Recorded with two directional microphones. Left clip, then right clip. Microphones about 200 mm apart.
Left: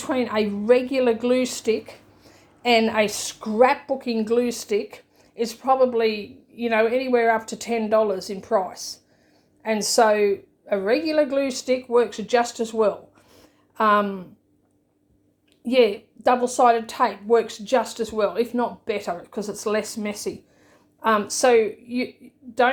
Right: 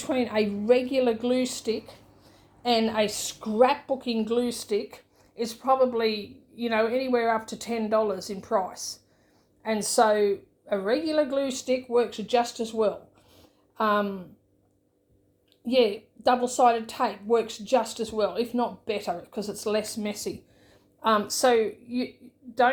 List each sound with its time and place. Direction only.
0.0 s a woman's voice: 10° left (ahead or behind)
13.3 s a sound: 15° left (ahead or behind)
15.6 s a woman's voice: 15° left (ahead or behind)